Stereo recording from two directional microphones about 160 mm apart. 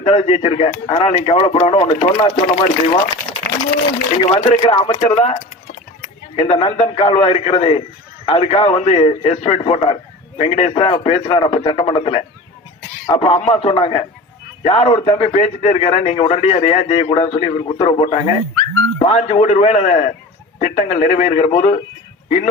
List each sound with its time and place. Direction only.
0.0 s a man's voice: 40° left (ahead or behind)
4.3 s a man's voice: 40° left (ahead or behind)